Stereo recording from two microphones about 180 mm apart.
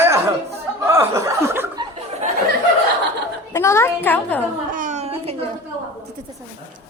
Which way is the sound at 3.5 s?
15° left (ahead or behind).